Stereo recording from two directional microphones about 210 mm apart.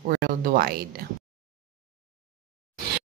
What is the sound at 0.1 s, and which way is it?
Speech, 45° right (ahead or behind).